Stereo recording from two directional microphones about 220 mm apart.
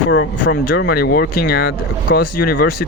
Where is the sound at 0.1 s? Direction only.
55° left (ahead or behind).